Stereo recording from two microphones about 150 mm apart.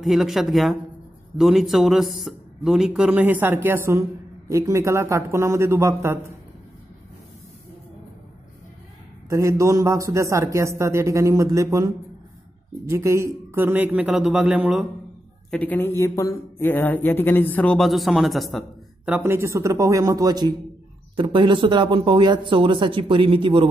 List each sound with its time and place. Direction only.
0.0 s speech: centre (ahead or behind); by 6.3 s 20° right (ahead or behind)
9.3 s a man's voice: 20° right (ahead or behind)
15.5 s speech: 10° left (ahead or behind)
19.0 s speech: 10° right (ahead or behind); by 23.7 s 35° right (ahead or behind)